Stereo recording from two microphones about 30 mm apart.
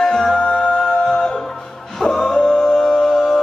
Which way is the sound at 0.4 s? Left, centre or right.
Left.